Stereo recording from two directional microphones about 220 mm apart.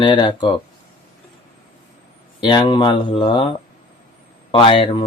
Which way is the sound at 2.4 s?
20° left (ahead or behind).